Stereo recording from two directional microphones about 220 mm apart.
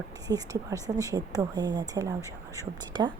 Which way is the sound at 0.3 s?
15° right (ahead or behind).